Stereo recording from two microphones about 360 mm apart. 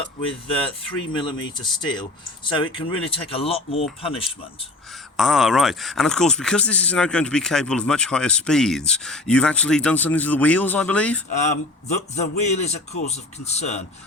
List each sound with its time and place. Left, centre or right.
1.1 s speech: centre
5.1 s speech: centre
11.3 s a man's voice: centre